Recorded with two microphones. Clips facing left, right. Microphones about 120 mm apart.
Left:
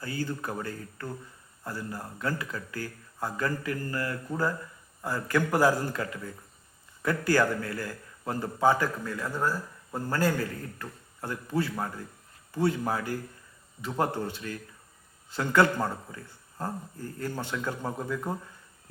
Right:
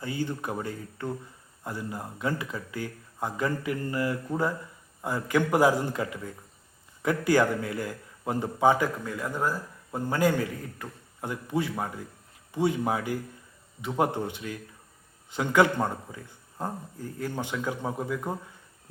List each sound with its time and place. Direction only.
0.0 s a man's voice: 20° right (ahead or behind)